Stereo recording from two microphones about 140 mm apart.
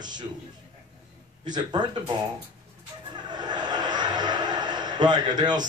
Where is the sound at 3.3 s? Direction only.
30° right (ahead or behind).